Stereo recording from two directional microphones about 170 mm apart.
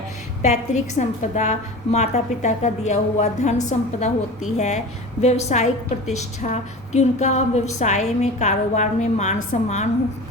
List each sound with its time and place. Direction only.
0.4 s a woman's voice: 45° left (ahead or behind)